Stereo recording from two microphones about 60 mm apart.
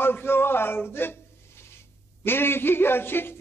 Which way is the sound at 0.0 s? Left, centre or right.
Left.